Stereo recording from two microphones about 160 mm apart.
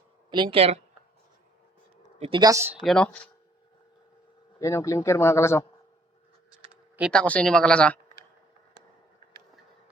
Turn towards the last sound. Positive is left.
turn(degrees=5)  # may be behind; listen again after turning